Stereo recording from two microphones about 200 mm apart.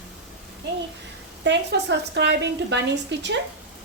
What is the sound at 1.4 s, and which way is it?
A woman's voice, 60° right (ahead or behind).